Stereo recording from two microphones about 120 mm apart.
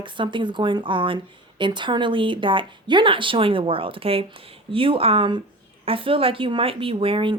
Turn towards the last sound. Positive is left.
turn(degrees=-45)  # may be behind; listen again after turning